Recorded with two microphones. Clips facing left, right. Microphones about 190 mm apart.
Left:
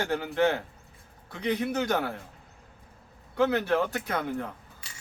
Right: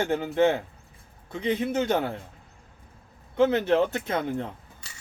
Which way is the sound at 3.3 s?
20° right (ahead or behind).